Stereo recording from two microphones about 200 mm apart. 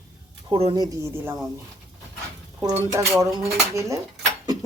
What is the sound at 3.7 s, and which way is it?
Speech, 15° right (ahead or behind).